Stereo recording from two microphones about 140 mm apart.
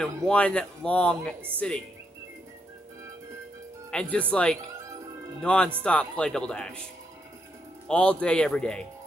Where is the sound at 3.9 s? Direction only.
5° left (ahead or behind).